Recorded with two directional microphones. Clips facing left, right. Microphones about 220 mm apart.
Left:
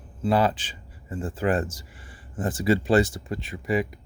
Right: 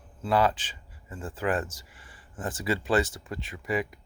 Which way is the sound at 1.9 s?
35° left (ahead or behind).